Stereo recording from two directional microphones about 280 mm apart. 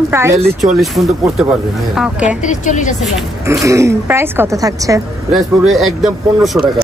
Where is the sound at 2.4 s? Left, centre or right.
Left.